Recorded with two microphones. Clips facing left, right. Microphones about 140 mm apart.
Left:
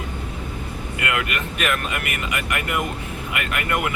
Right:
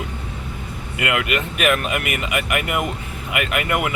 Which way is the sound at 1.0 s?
15° right (ahead or behind).